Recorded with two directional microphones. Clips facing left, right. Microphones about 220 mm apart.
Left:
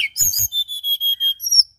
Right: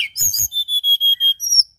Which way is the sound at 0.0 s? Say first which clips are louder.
Left 1 dB; 20° left (ahead or behind).